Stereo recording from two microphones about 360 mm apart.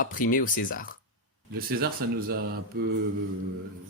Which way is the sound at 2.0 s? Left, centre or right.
Right.